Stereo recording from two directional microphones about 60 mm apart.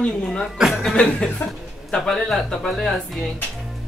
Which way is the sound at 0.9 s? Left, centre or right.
Centre.